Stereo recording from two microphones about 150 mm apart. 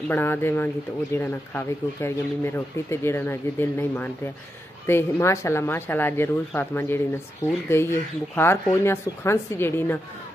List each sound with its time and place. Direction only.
0.1 s speech: 15° left (ahead or behind)